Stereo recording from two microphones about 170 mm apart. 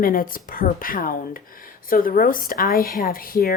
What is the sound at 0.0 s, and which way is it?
Speech, 55° left (ahead or behind).